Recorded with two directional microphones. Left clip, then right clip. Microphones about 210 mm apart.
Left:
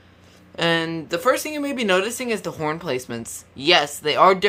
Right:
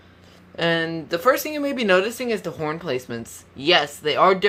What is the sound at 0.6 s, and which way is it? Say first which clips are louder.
Speech: left 1 dB; 10° left (ahead or behind).